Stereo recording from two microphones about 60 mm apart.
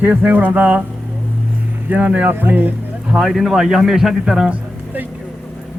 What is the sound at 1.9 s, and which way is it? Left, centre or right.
Speech, right.